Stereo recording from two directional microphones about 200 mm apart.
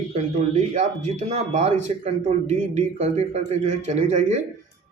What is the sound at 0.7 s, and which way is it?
Speech, 35° right (ahead or behind).